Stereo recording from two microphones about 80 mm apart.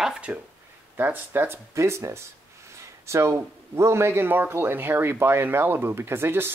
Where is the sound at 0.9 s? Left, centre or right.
Right.